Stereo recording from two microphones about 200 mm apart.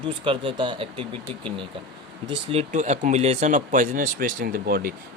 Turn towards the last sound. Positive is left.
turn(degrees=-45)  # may be behind; listen again after turning